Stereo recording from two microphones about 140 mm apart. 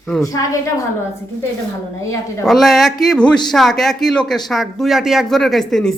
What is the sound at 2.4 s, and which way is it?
Speech, centre (ahead or behind).